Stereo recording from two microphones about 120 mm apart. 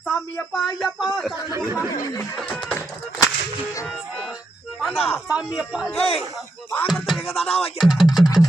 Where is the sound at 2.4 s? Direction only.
5° left (ahead or behind).